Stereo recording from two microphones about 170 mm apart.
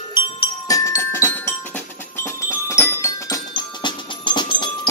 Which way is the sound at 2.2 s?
15° left (ahead or behind).